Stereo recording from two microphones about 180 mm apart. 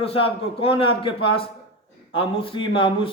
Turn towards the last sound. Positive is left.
turn(degrees=30)  # may be behind; listen again after turning